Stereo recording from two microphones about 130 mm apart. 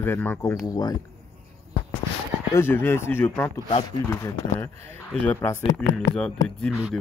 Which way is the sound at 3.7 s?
40° left (ahead or behind).